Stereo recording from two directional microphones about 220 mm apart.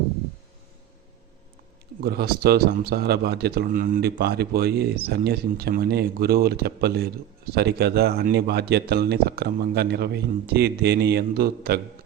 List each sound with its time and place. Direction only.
2.0 s speech: 45° right (ahead or behind)